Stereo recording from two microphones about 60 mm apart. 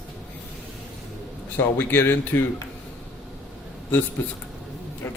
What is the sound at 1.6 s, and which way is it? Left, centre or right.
Speech, left.